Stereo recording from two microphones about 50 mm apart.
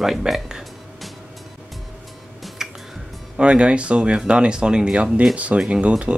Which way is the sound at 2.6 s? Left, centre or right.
Centre.